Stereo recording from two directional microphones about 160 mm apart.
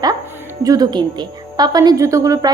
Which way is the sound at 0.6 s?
25° right (ahead or behind).